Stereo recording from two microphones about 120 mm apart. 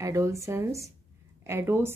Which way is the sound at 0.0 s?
25° right (ahead or behind).